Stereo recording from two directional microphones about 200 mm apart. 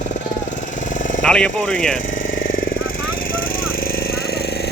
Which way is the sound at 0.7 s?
40° left (ahead or behind).